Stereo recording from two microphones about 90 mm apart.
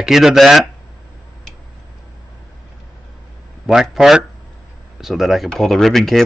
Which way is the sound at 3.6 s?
5° right (ahead or behind).